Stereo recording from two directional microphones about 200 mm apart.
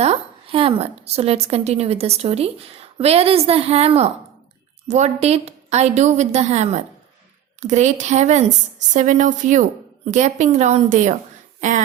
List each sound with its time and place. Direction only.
0.0 s a woman's voice: 30° right (ahead or behind)